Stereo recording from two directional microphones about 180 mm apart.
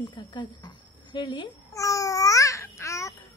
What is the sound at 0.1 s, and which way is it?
A child's voice, 25° left (ahead or behind).